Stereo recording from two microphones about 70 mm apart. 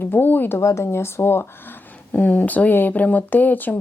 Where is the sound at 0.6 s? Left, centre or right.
Left.